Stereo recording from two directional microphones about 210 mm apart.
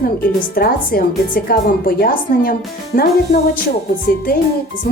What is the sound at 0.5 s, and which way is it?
Speech, 45° left (ahead or behind).